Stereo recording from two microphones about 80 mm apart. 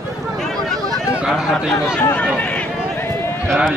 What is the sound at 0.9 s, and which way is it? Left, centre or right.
Speech, centre.